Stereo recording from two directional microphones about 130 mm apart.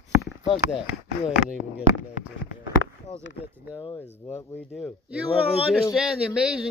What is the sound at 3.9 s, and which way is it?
Speech, 20° left (ahead or behind).